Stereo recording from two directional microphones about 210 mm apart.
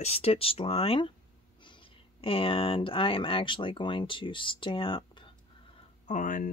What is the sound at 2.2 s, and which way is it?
Speech, 25° left (ahead or behind).